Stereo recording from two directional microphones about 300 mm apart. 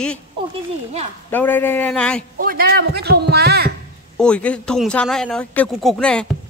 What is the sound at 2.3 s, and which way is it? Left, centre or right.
A man's voice, right.